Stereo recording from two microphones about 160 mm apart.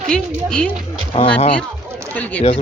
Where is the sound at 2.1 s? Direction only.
10° left (ahead or behind).